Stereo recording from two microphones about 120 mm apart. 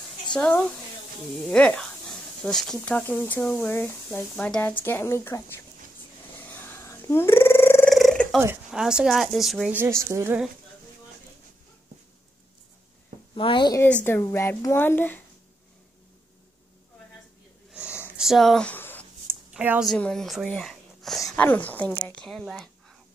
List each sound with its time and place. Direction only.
0.3 s a woman's voice: 10° left (ahead or behind)
4.8 s speech: 20° left (ahead or behind)
6.5 s a sound: 20° left (ahead or behind)
7.9 s a sound: centre (ahead or behind)
8.7 s a woman's voice: 5° right (ahead or behind)
9.7 s a woman's voice: 20° right (ahead or behind)
13.3 s speech: 45° left (ahead or behind)
13.8 s speech: 15° left (ahead or behind)
17.6 s a sound: 10° right (ahead or behind)
18.0 s speech: 5° right (ahead or behind)
18.7 s a sound: 15° left (ahead or behind)
19.5 s a woman's voice: 15° right (ahead or behind)
20.0 s speech: 5° left (ahead or behind)
21.4 s a woman's voice: 10° left (ahead or behind)